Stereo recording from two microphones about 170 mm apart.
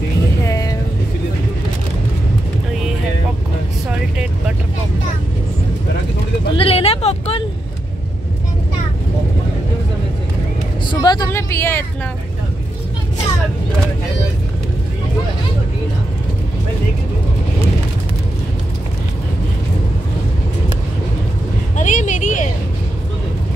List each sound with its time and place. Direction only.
0.5 s vehicle: 20° left (ahead or behind)
6.5 s a sound: 35° left (ahead or behind)
10.9 s vehicle: 25° left (ahead or behind)
21.7 s vehicle: 50° left (ahead or behind)